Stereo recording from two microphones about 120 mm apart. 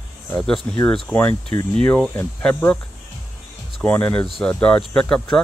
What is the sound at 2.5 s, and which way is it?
Speech, 20° left (ahead or behind).